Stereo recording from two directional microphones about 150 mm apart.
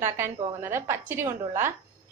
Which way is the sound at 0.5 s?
15° right (ahead or behind).